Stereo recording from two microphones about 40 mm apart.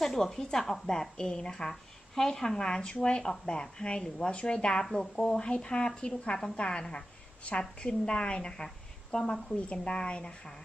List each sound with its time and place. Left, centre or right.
0.0 s a woman's voice: centre